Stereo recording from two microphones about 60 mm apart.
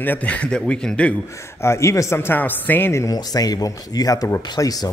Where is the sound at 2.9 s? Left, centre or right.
Left.